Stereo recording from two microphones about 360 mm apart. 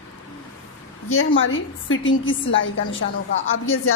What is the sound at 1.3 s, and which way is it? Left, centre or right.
A woman's voice, left.